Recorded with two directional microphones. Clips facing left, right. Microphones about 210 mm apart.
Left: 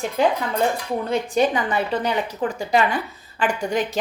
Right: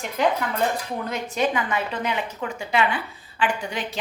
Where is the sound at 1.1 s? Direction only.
35° left (ahead or behind).